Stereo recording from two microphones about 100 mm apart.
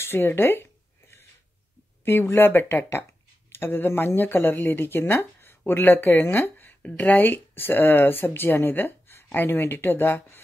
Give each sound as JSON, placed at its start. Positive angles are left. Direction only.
{"t": 0.0, "sound": "speech", "side_deg": 25}
{"t": 2.0, "sound": "speech", "side_deg": 20}